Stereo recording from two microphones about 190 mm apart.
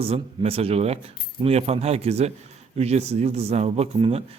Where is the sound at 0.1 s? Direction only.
30° right (ahead or behind).